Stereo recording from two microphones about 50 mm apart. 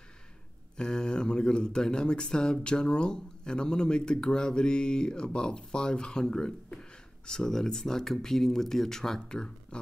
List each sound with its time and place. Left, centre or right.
0.7 s speech: centre